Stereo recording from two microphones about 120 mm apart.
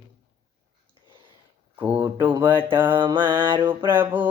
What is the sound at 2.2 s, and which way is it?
Mantra, 15° right (ahead or behind).